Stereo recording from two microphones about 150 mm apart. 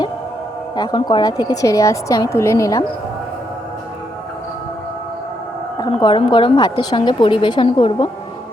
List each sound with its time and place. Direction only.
0.8 s a woman's voice: 30° left (ahead or behind)
5.9 s a woman's voice: 35° left (ahead or behind)